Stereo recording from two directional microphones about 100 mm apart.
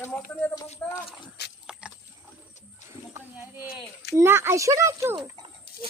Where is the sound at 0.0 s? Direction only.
15° left (ahead or behind).